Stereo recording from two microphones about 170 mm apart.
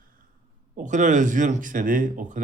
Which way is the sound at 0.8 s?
45° right (ahead or behind).